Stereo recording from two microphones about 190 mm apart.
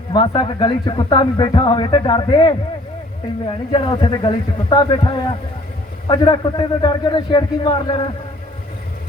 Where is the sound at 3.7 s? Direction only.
25° left (ahead or behind).